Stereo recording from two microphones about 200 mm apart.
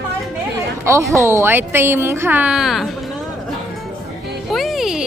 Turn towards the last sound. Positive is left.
turn(degrees=0)  # may be behind; listen again after turning